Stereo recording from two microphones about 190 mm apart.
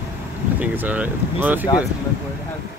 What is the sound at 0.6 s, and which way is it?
Speech, 10° right (ahead or behind).